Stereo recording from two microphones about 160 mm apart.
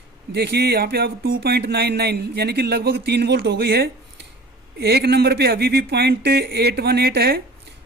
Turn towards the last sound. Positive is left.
turn(degrees=-75)  # may be behind; listen again after turning